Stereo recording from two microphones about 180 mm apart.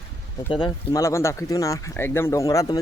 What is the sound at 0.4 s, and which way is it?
Speech, 25° left (ahead or behind).